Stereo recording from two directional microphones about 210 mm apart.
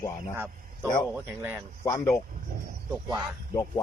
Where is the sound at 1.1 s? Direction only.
10° right (ahead or behind).